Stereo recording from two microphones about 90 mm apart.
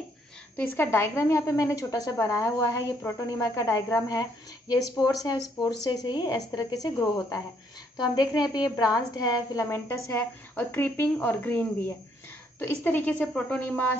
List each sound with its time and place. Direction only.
0.6 s a woman's voice: 30° left (ahead or behind); by 6.9 s 45° left (ahead or behind)
8.0 s a woman's voice: 50° left (ahead or behind)
9.7 s speech: 30° left (ahead or behind)
13.3 s speech: 10° left (ahead or behind)